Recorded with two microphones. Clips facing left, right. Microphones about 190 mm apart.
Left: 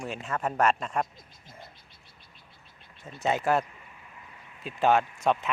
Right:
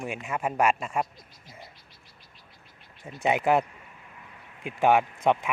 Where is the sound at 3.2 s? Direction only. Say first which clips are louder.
Right 3 dB; 15° right (ahead or behind).